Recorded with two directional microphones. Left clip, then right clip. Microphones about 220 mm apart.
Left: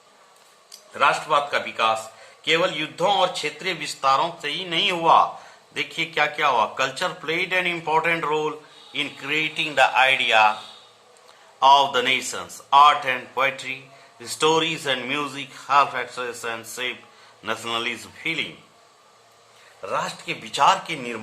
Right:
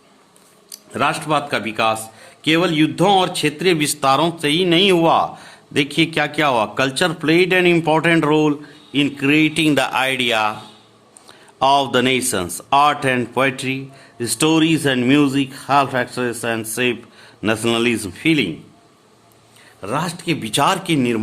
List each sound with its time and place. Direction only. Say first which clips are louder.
0.9 s speech: right 1 dB; 50° right (ahead or behind)
11.6 s speech: right 1 dB; 45° right (ahead or behind)
19.8 s speech: right 4 dB; 50° right (ahead or behind)